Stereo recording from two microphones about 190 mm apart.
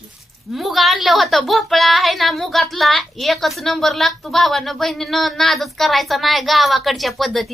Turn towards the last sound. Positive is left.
turn(degrees=0)  # may be behind; listen again after turning